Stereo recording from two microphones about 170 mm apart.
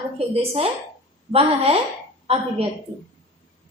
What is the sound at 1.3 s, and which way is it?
A woman's voice, 35° right (ahead or behind).